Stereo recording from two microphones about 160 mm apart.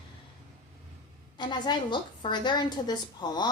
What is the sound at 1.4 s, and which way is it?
A woman's voice, 30° left (ahead or behind).